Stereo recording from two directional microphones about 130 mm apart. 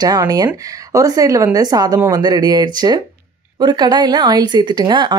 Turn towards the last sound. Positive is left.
turn(degrees=-35)  # may be behind; listen again after turning